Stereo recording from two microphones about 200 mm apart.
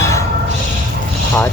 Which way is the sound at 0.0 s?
15° left (ahead or behind).